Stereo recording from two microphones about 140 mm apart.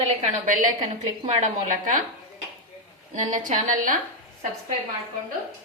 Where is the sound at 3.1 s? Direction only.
65° right (ahead or behind).